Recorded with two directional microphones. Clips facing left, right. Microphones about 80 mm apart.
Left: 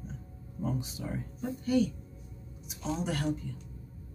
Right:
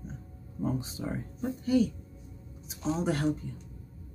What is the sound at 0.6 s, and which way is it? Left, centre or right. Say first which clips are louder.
Speech: right 2 dB; right.